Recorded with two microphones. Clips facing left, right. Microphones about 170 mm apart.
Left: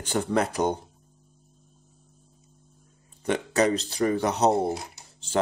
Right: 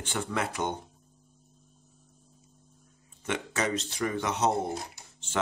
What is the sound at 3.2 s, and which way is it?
Speech, 35° left (ahead or behind).